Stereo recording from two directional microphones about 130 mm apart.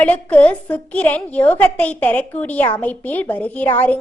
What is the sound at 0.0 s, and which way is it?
A woman's voice, 10° left (ahead or behind).